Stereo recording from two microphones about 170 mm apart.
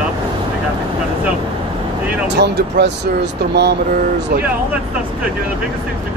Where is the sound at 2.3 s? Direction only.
85° right.